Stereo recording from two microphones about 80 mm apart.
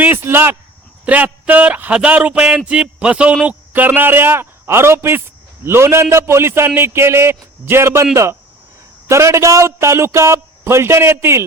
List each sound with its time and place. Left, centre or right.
0.0 s a man's voice: right
3.4 s a man's voice: right